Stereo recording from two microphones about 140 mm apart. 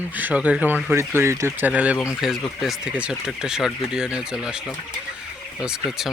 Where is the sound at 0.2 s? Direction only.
10° right (ahead or behind).